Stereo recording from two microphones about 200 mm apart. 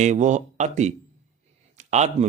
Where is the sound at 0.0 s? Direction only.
35° right (ahead or behind).